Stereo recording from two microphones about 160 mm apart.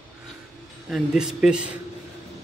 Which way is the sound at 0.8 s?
5° right (ahead or behind).